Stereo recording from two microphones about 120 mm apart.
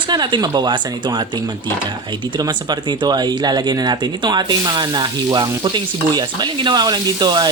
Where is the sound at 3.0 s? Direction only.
35° right (ahead or behind).